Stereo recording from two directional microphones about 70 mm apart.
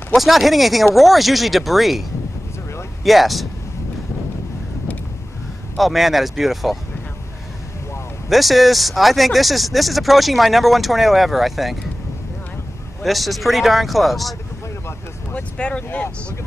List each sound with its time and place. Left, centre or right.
0.2 s speech: centre
5.8 s speech: centre
8.3 s speech: centre
13.0 s speech: centre
15.3 s speech: centre